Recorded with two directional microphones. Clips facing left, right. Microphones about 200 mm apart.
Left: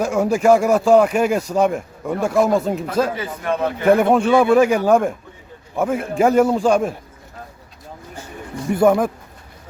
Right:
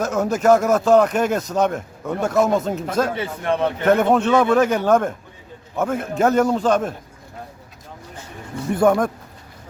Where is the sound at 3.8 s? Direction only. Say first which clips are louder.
Left 3 dB; 10° left (ahead or behind).